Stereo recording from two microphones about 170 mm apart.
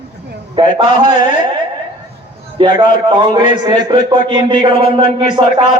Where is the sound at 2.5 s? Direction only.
30° right (ahead or behind).